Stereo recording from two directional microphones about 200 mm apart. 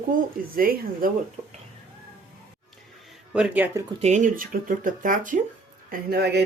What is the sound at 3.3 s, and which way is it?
Speech, 5° right (ahead or behind).